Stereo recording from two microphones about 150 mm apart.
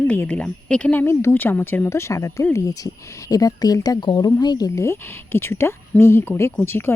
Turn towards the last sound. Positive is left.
turn(degrees=15)  # may be behind; listen again after turning